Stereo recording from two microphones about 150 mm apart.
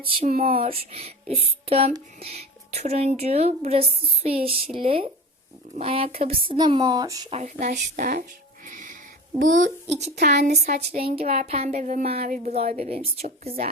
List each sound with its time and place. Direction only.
0.3 s speech: 60° right (ahead or behind)
0.5 s a woman's voice: 40° right (ahead or behind)
7.3 s speech: 50° right (ahead or behind)
8.6 s music: 60° right (ahead or behind)
9.4 s a woman's voice: 60° right (ahead or behind); by 13.5 s 40° right (ahead or behind)